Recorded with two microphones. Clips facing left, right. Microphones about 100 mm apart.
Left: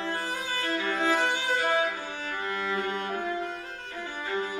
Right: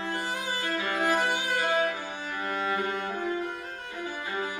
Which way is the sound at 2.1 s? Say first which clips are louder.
Even; 15° right (ahead or behind).